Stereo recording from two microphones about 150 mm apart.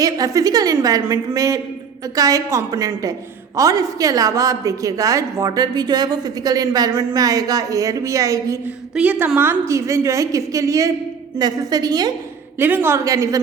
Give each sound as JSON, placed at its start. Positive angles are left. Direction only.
{"t": 0.0, "sound": "a woman's voice", "side_deg": -25}
{"t": 9.0, "sound": "a woman's voice", "side_deg": -10}
{"t": 12.5, "sound": "a woman's voice", "side_deg": -15}